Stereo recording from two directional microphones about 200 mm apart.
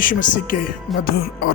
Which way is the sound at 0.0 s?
40° left (ahead or behind).